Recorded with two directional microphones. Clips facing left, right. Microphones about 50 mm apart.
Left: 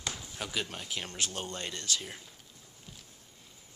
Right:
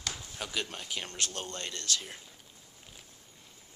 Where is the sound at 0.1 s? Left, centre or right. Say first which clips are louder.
Even; centre.